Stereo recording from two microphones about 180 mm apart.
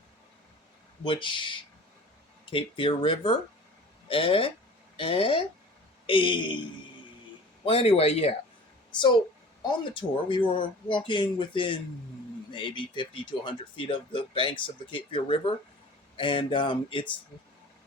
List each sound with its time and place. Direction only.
1.0 s a man's voice: 30° left (ahead or behind)
7.6 s a man's voice: 30° left (ahead or behind)